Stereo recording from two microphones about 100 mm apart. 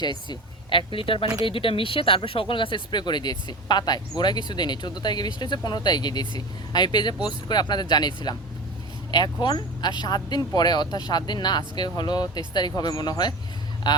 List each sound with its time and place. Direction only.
0.0 s speech: 45° left (ahead or behind)